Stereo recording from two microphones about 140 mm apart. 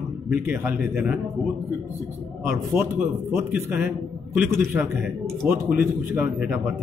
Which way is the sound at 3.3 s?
15° right (ahead or behind).